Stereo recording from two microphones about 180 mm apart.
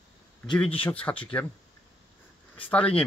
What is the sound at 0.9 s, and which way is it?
Speech, 10° left (ahead or behind).